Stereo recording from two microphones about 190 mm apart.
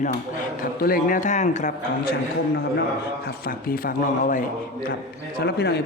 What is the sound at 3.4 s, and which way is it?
Speech, 50° left (ahead or behind).